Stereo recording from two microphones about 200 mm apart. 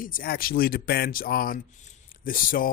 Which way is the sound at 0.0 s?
45° left (ahead or behind).